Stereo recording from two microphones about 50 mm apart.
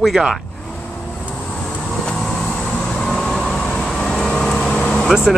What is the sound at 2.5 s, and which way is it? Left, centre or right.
Vehicle, centre.